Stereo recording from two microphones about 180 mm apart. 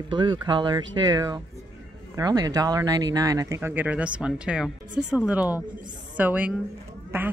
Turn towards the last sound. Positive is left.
turn(degrees=-10)  # may be behind; listen again after turning